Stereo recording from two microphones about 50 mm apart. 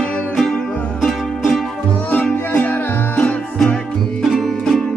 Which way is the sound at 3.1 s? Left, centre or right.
Left.